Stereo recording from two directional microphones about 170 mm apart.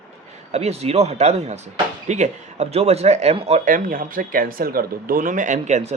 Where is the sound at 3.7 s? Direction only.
55° right (ahead or behind).